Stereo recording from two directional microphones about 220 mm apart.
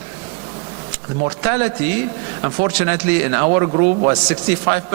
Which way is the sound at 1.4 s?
15° right (ahead or behind).